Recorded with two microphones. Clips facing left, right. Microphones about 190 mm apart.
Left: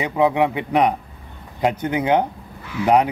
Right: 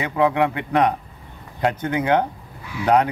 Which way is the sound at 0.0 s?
15° left (ahead or behind).